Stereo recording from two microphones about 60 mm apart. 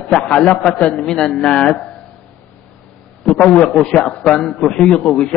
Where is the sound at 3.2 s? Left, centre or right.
Centre.